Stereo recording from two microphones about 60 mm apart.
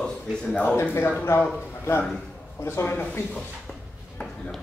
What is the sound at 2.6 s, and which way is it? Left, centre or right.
Speech, left.